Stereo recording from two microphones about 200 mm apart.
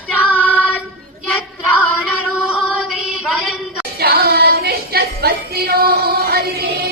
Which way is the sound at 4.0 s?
50° right (ahead or behind).